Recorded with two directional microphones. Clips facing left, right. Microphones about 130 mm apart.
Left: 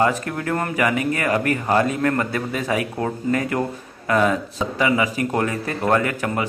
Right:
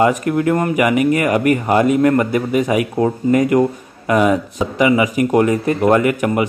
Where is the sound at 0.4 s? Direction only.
15° right (ahead or behind).